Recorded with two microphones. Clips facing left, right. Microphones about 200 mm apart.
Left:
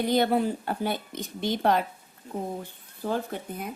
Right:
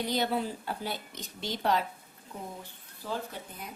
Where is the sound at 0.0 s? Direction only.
55° left (ahead or behind).